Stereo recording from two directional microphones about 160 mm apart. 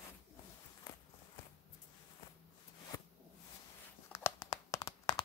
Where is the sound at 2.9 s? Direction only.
20° left (ahead or behind).